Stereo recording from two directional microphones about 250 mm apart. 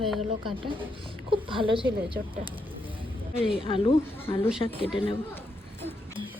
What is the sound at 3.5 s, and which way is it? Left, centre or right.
Speech, left.